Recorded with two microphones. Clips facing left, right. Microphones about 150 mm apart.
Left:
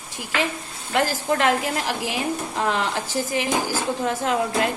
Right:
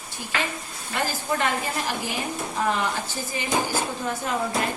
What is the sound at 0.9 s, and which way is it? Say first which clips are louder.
A woman's voice: left 5 dB; 85° left.